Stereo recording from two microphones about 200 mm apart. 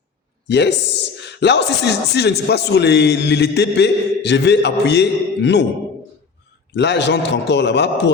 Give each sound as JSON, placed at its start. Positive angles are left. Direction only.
{"t": 0.4, "sound": "speech", "side_deg": 60}
{"t": 6.7, "sound": "speech", "side_deg": 60}